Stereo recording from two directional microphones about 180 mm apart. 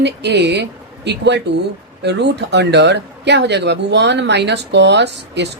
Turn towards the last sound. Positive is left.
turn(degrees=-70)  # may be behind; listen again after turning